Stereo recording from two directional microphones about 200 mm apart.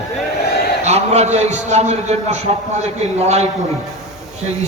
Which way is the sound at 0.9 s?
35° right (ahead or behind).